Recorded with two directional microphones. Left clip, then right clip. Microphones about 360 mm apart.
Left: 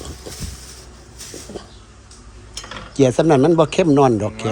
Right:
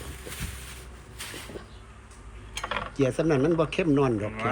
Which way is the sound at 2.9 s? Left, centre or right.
Centre.